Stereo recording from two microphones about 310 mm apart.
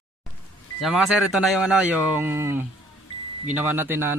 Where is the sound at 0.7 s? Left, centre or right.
Centre.